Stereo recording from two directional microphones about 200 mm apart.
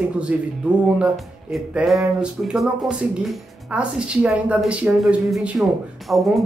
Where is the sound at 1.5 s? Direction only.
Centre (ahead or behind).